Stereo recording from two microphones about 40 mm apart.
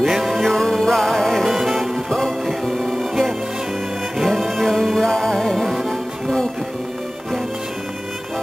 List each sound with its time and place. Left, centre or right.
0.0 s music: centre
1.4 s music: centre